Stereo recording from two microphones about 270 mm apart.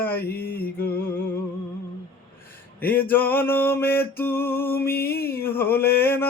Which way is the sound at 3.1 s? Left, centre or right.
Centre.